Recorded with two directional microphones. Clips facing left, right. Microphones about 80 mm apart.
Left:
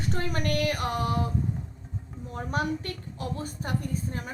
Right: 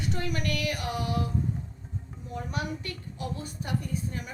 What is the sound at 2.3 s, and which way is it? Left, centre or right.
Speech, left.